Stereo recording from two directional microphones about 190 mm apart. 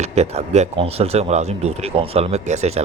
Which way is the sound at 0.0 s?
35° right (ahead or behind).